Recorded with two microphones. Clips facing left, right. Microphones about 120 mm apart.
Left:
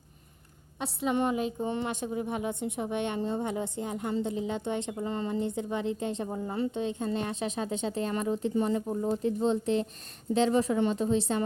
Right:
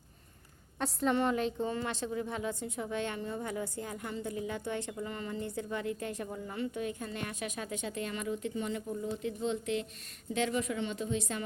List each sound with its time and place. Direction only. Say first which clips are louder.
0.8 s a woman's voice: even; 5° left (ahead or behind)
1.1 s a sound: left 4 dB; 15° left (ahead or behind)
1.7 s a woman's voice: left 3 dB; 20° left (ahead or behind)
6.2 s a woman's voice: left 6 dB; 35° left (ahead or behind)
8.9 s speech: left 7 dB; 50° left (ahead or behind)
9.2 s a woman's voice: left 7 dB; 35° left (ahead or behind)